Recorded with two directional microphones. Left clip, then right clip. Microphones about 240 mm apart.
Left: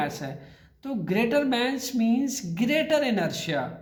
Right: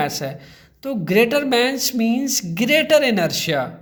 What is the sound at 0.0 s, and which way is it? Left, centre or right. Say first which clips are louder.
Speech: right 7 dB; right.